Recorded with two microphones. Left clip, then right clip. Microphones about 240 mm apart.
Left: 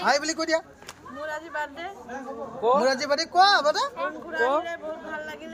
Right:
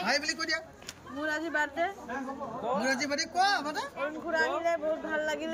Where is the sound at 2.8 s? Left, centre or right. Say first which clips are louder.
Left 7 dB; centre.